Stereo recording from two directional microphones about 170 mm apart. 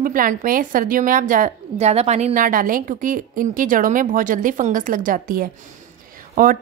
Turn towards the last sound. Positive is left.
turn(degrees=-55)  # may be behind; listen again after turning